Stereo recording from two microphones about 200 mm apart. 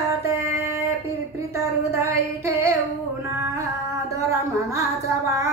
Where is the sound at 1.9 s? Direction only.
15° right (ahead or behind).